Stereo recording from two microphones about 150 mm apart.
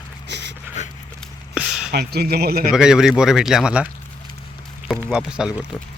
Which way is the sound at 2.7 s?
5° right (ahead or behind).